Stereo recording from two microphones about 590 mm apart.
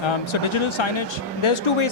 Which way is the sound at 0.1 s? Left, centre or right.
Left.